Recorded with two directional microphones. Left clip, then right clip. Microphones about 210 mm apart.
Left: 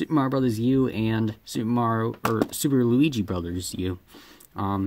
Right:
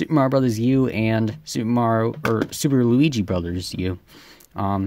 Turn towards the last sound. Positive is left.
turn(degrees=-35)  # may be behind; listen again after turning